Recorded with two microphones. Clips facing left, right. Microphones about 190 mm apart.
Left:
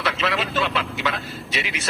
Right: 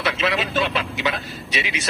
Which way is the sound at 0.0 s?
20° right (ahead or behind).